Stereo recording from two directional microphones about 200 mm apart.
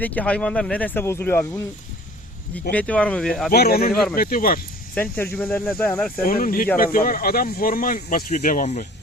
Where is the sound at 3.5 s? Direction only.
50° left (ahead or behind).